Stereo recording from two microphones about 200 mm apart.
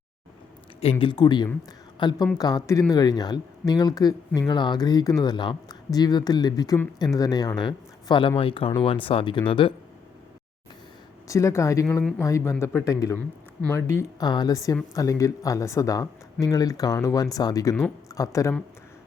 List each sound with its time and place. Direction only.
0.8 s speech: 30° left (ahead or behind)
11.3 s speech: 15° left (ahead or behind)